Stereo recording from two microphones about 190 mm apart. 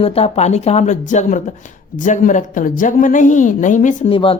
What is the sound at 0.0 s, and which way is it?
A woman's voice, 30° left (ahead or behind).